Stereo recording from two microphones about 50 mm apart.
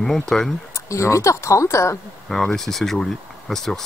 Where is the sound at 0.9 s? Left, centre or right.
Left.